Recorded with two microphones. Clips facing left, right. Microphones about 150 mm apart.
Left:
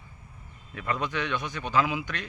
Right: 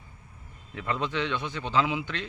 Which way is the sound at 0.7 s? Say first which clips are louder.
Even; 20° right (ahead or behind).